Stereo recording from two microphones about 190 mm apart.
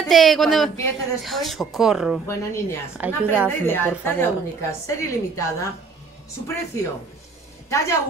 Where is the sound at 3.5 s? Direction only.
10° left (ahead or behind).